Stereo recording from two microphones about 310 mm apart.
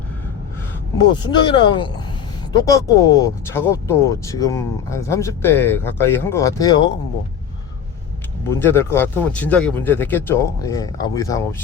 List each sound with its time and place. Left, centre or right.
1.1 s speech: centre
8.4 s speech: centre